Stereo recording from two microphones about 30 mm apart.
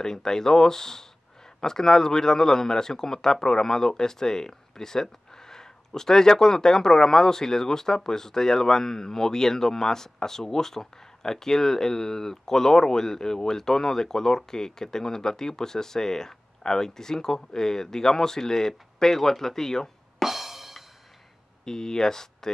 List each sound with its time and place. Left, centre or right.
0.0 s speech: centre
20.2 s music: centre
21.6 s speech: centre